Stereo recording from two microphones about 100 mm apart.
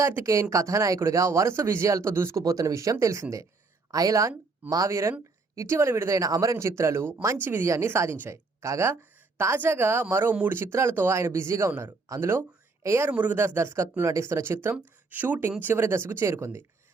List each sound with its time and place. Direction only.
0.0 s a woman's voice: 25° right (ahead or behind)